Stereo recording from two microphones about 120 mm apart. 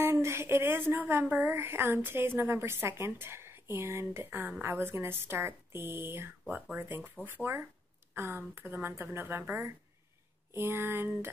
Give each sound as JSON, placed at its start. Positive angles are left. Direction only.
{"t": 0.0, "sound": "a woman's voice", "side_deg": -20}